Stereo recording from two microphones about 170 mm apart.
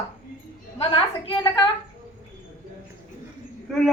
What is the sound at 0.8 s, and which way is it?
Speech, 30° left (ahead or behind).